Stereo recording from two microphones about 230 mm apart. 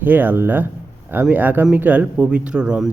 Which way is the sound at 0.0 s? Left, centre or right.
Centre.